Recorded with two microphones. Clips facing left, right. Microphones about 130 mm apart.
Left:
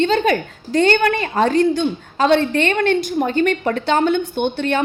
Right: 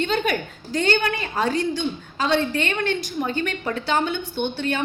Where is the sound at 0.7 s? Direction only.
55° left (ahead or behind).